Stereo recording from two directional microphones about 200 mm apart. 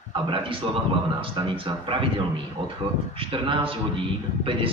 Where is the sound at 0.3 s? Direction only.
25° right (ahead or behind).